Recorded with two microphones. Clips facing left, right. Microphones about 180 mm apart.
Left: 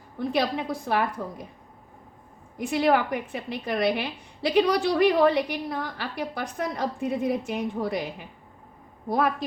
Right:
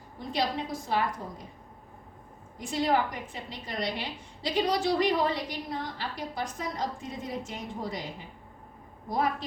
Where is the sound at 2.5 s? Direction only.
65° left (ahead or behind).